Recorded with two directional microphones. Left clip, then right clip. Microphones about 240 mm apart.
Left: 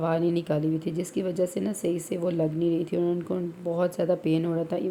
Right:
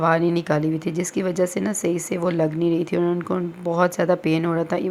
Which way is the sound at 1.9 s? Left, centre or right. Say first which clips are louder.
Right 4 dB; centre.